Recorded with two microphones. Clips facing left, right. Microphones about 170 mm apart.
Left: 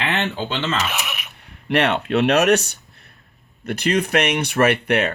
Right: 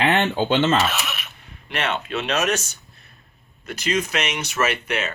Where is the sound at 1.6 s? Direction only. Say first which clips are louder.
Left 7 dB; 65° left (ahead or behind).